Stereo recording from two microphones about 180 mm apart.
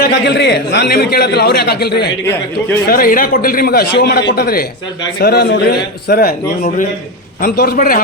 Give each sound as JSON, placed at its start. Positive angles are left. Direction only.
{"t": 0.0, "sound": "a man's voice", "side_deg": 70}
{"t": 6.6, "sound": "a man's voice", "side_deg": 45}
{"t": 7.4, "sound": "a man's voice", "side_deg": 60}